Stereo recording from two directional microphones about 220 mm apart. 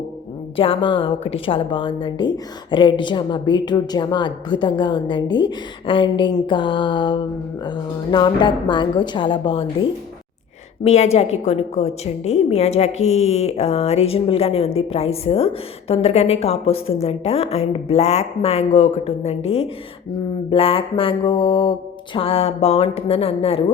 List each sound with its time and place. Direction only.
0.5 s a woman's voice: 25° left (ahead or behind)
10.8 s a woman's voice: 30° left (ahead or behind)
20.5 s a woman's voice: 25° left (ahead or behind)